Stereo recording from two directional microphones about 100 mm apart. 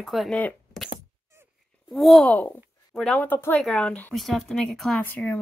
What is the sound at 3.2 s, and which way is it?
Speech, 20° left (ahead or behind).